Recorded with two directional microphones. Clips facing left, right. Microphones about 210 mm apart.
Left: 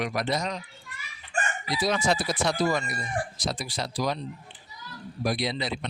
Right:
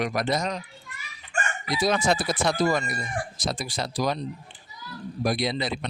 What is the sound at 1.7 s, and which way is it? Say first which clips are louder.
Speech: right 3 dB; 45° right (ahead or behind).